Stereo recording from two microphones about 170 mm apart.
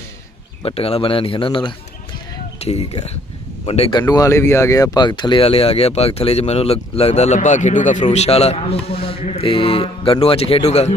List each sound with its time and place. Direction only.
0.6 s speech: 35° left (ahead or behind)
4.1 s speech: 15° left (ahead or behind); by 10.9 s 40° left (ahead or behind)